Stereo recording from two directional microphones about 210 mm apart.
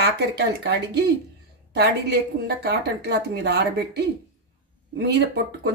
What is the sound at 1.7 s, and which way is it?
Speech, 50° right (ahead or behind).